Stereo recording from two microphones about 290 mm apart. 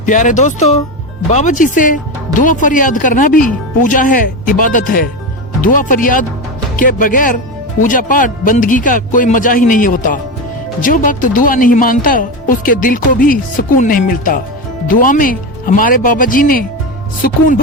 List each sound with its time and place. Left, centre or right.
0.0 s speech: left